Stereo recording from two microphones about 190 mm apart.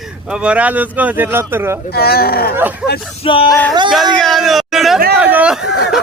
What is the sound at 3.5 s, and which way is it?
Speech, 5° left (ahead or behind).